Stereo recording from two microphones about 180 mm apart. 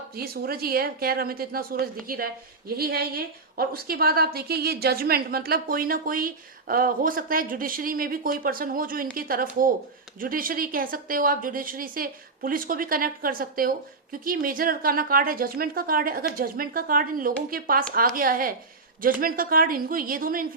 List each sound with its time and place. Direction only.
0.1 s a woman's voice: 55° right (ahead or behind)